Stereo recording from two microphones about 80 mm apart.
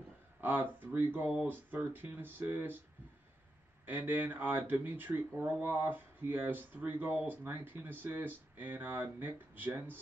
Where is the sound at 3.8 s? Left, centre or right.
Right.